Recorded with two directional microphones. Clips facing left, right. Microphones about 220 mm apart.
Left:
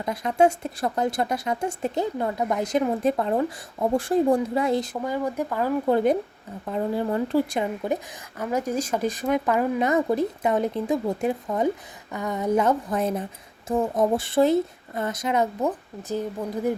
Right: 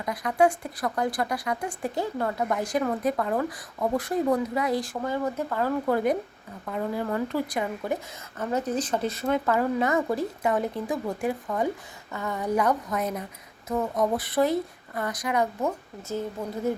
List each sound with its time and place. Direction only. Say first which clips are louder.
0.0 s speech: left 2 dB; 25° left (ahead or behind)
5.0 s speech: left 2 dB; 15° left (ahead or behind)
6.7 s speech: left 3 dB; 30° left (ahead or behind)
8.4 s speech: left 1 dB; 10° left (ahead or behind)